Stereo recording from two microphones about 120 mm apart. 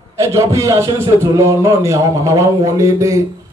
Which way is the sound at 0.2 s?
25° right (ahead or behind).